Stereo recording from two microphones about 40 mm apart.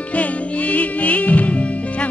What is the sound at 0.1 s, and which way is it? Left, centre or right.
Music, left.